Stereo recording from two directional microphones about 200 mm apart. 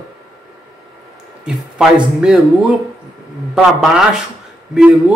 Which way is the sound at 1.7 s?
5° right (ahead or behind).